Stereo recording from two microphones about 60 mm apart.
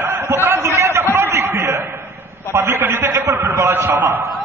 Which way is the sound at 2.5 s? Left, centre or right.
Right.